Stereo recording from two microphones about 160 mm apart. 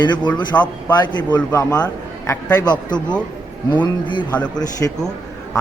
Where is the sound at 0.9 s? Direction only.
25° left (ahead or behind).